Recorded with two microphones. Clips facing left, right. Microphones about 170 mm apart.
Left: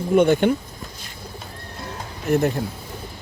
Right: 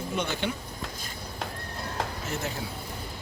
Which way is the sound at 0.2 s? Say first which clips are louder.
Left 15 dB; 55° left (ahead or behind).